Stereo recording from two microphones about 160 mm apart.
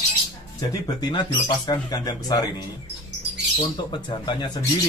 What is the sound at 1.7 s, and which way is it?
Speech, 25° left (ahead or behind).